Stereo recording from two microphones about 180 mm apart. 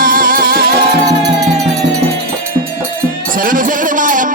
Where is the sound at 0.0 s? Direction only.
50° right (ahead or behind).